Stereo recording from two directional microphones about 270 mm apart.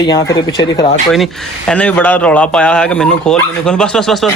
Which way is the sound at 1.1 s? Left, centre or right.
Centre.